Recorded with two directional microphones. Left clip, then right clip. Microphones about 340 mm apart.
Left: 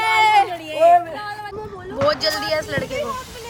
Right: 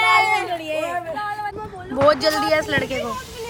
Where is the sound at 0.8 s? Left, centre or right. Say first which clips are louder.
Left 10 dB; centre.